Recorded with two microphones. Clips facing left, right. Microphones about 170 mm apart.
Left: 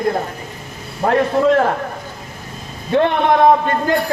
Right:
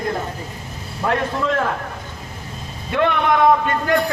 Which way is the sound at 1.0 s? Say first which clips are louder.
Left 5 dB; 35° left (ahead or behind).